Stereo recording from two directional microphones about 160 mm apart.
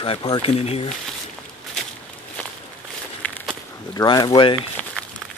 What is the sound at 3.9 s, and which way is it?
Speech, 25° left (ahead or behind).